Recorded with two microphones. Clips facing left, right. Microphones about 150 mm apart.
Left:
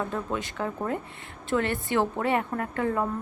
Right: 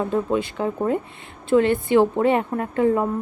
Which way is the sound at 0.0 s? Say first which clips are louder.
Right 8 dB; 20° right (ahead or behind).